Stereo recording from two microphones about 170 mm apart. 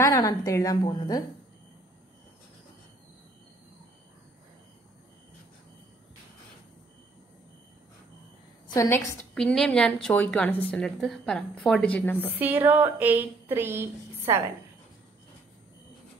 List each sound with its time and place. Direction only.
0.0 s a woman's voice: 20° left (ahead or behind)
8.7 s a woman's voice: 20° left (ahead or behind)
9.3 s a woman's voice: 5° left (ahead or behind)
12.3 s a woman's voice: 10° right (ahead or behind)